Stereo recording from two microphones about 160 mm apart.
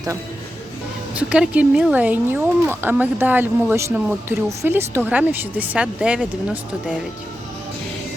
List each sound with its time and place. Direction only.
1.1 s speech: 10° right (ahead or behind)